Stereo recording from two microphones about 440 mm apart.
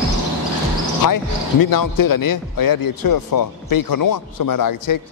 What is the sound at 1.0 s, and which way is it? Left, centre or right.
Speech, left.